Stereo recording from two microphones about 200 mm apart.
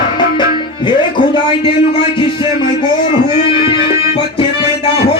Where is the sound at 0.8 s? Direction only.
25° left (ahead or behind).